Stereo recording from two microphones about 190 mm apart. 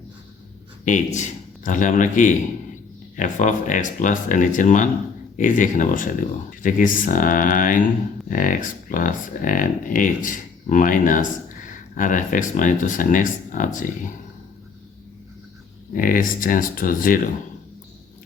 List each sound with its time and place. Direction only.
0.9 s a man's voice: 40° left (ahead or behind)
15.9 s speech: 45° left (ahead or behind)